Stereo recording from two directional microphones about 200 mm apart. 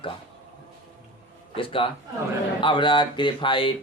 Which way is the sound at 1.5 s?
25° left (ahead or behind).